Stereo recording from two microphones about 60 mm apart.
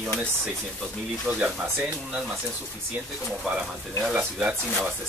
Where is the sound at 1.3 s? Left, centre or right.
Right.